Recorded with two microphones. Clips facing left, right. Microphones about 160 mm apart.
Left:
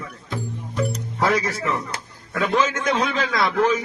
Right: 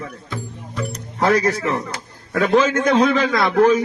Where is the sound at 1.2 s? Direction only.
60° right (ahead or behind).